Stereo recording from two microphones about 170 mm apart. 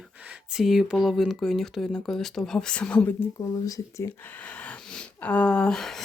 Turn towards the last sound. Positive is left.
turn(degrees=5)  # may be behind; listen again after turning